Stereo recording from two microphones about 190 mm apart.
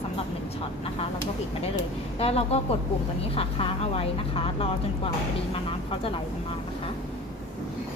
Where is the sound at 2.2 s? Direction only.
30° left (ahead or behind).